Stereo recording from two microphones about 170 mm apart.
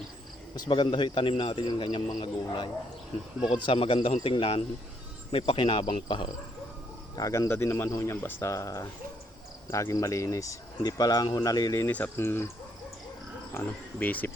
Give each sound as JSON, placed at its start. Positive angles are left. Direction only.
{"t": 0.5, "sound": "speech", "side_deg": 25}
{"t": 7.2, "sound": "speech", "side_deg": 20}
{"t": 14.0, "sound": "speech", "side_deg": 10}